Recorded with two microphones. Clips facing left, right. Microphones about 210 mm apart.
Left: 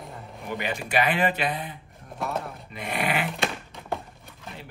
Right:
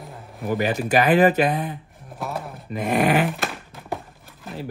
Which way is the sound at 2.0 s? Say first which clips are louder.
Even; centre (ahead or behind).